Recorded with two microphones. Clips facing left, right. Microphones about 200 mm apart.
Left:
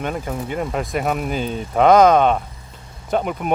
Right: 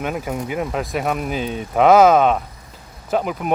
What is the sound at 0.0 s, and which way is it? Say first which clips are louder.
Speech: right 1 dB; 5° right (ahead or behind).